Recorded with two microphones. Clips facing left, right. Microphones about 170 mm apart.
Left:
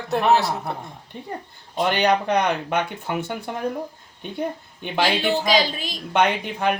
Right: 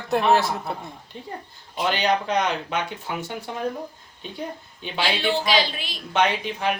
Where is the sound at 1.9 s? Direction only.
60° left (ahead or behind).